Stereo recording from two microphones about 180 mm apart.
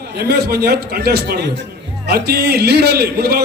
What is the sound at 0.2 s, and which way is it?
A man's voice, 60° right (ahead or behind).